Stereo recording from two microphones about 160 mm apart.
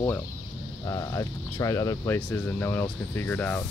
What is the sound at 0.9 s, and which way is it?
Speech, 20° left (ahead or behind).